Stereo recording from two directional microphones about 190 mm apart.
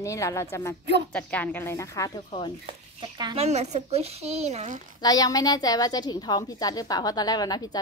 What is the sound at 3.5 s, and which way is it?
Speech, 35° right (ahead or behind).